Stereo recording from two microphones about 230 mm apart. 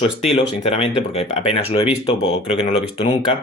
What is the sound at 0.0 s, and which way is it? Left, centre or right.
Speech, left.